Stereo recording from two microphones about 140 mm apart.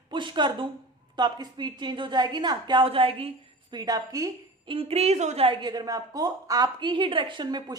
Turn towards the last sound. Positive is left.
turn(degrees=-30)  # may be behind; listen again after turning